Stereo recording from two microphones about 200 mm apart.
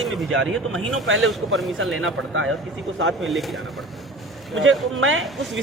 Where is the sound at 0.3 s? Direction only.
90° right.